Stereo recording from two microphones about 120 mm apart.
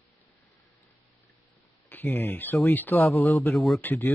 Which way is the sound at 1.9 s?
15° left (ahead or behind).